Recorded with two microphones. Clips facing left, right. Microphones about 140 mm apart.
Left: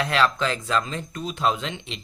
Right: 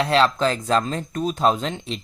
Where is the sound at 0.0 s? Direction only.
30° right (ahead or behind).